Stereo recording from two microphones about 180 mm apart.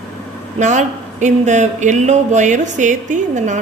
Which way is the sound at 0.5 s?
40° right (ahead or behind).